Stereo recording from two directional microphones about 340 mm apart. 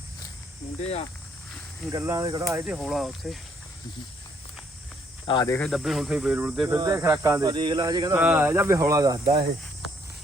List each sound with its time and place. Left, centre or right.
0.8 s speech: centre
1.9 s speech: centre
5.2 s speech: centre